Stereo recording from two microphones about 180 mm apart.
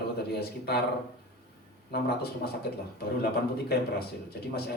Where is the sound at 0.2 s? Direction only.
65° left (ahead or behind).